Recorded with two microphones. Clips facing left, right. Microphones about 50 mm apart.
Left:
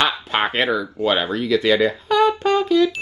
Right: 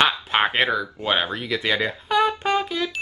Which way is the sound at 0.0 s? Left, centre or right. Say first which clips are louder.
Even; centre.